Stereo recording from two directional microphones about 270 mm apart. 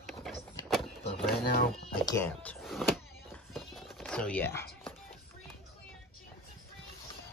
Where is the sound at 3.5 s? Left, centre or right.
Centre.